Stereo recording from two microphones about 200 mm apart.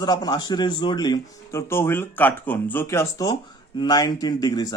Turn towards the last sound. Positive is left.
turn(degrees=20)  # may be behind; listen again after turning